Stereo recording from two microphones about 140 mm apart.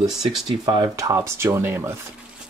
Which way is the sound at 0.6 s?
25° right (ahead or behind).